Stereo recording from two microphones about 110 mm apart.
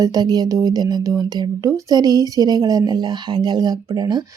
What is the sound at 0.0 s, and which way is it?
Speech, 35° right (ahead or behind).